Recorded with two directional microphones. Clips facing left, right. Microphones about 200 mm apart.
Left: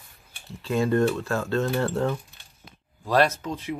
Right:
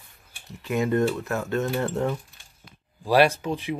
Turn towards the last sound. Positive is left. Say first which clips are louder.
# right 3 dB
turn(degrees=-15)  # may be behind; listen again after turning